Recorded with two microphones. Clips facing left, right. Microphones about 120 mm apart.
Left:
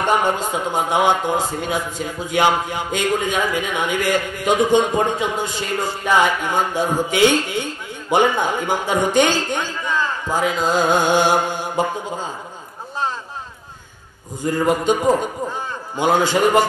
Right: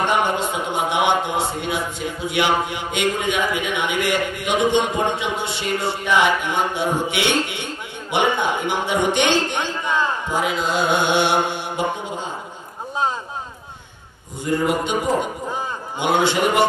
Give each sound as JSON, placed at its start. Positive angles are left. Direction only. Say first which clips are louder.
{"t": 0.0, "sound": "speech", "louder": "left 1 dB", "side_deg": 40}
{"t": 14.4, "sound": "speech", "louder": "left 2 dB", "side_deg": 40}
{"t": 16.0, "sound": "speech", "louder": "left 2 dB", "side_deg": 40}